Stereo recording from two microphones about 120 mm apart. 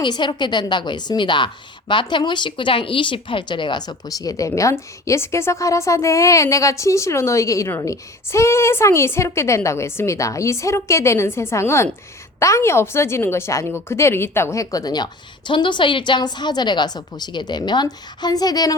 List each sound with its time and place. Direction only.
0.0 s a woman's voice: 40° left (ahead or behind)